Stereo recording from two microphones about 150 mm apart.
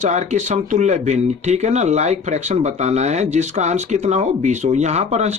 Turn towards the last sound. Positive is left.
turn(degrees=-45)  # may be behind; listen again after turning